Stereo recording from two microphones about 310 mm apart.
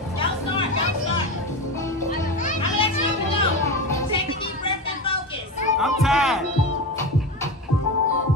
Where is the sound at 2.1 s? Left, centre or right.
Left.